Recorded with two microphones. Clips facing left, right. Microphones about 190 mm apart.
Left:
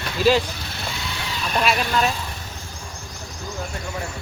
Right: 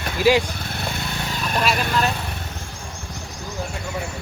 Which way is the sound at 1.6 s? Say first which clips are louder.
Left 1 dB; centre (ahead or behind).